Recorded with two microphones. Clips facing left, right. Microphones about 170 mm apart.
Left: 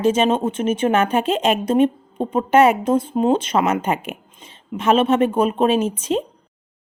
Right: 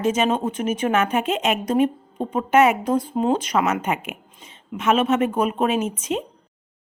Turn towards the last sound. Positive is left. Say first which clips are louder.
# left 4 dB
turn(degrees=30)  # may be behind; listen again after turning